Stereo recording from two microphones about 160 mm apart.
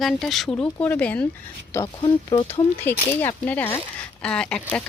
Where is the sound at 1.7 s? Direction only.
25° left (ahead or behind).